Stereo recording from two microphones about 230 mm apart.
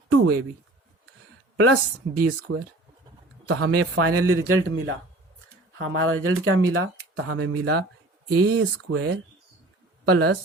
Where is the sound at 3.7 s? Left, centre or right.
Right.